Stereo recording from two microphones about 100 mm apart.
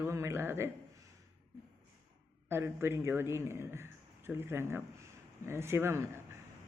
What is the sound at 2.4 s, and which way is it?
Speech, 25° right (ahead or behind).